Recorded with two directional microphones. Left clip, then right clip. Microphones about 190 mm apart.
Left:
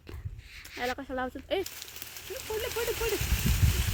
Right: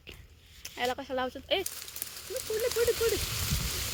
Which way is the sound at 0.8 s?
25° left (ahead or behind).